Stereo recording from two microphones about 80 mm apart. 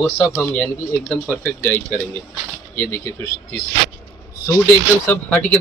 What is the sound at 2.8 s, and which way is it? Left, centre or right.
Speech, left.